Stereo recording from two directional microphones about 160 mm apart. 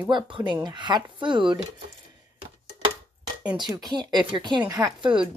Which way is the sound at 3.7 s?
25° right (ahead or behind).